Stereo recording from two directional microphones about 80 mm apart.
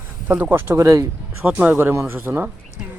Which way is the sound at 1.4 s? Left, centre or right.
Right.